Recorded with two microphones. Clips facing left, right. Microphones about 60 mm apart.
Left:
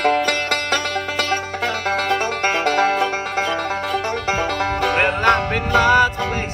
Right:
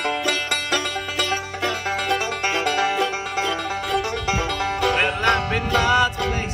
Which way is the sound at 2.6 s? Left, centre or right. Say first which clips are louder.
Left 4 dB; left.